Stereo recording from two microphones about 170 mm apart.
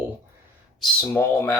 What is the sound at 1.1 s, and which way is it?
Speech, 15° left (ahead or behind).